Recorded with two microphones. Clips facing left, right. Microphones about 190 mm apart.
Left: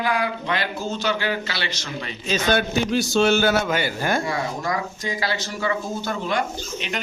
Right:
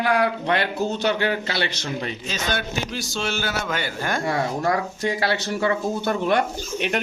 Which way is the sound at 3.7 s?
10° left (ahead or behind).